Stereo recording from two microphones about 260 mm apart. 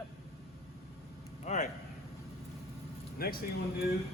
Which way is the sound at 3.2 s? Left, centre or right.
Left.